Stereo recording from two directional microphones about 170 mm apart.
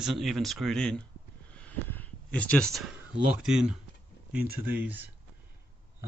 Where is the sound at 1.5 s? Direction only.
10° left (ahead or behind).